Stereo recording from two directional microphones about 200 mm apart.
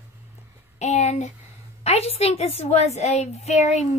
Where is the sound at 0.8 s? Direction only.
35° left (ahead or behind).